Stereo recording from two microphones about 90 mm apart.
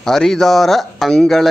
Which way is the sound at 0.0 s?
5° left (ahead or behind).